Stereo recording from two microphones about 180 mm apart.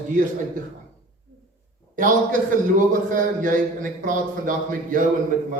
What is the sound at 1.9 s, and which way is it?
A man's voice, 45° right (ahead or behind).